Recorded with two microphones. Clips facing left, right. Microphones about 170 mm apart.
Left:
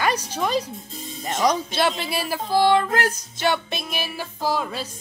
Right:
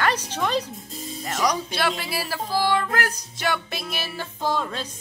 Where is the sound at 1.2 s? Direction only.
25° left (ahead or behind); by 4.9 s 5° left (ahead or behind).